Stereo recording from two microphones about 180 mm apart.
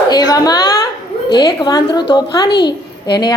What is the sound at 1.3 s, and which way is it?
A child's voice, 25° left (ahead or behind).